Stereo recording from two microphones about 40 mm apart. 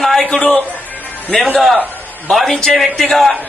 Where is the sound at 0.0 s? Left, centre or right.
Centre.